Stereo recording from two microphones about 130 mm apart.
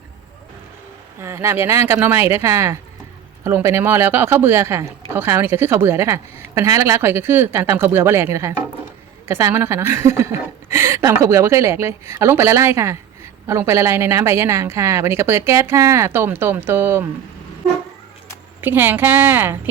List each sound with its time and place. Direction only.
1.2 s speech: 20° right (ahead or behind)
18.6 s speech: 15° right (ahead or behind)